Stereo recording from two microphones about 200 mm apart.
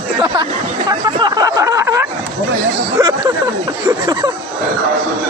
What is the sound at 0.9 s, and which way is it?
Speech, 20° right (ahead or behind).